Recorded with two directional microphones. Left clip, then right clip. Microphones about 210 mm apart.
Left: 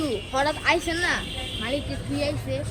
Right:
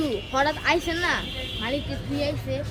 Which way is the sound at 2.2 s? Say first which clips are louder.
Even; 45° right (ahead or behind).